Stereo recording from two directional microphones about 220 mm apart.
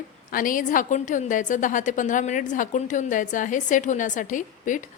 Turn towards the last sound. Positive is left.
turn(degrees=35)  # may be behind; listen again after turning